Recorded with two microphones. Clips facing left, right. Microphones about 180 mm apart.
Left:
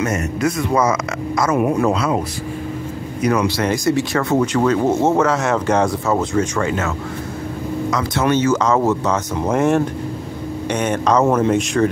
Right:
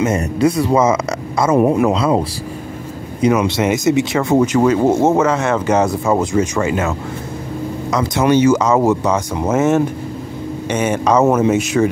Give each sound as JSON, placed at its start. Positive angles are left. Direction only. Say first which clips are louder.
{"t": 0.0, "sound": "speech", "louder": "right 4 dB", "side_deg": -30}
{"t": 7.9, "sound": "speech", "louder": "right 4 dB", "side_deg": -20}